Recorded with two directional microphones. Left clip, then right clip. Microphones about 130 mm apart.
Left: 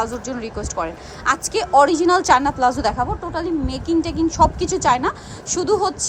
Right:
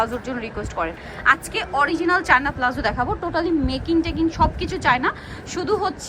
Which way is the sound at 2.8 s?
15° left (ahead or behind).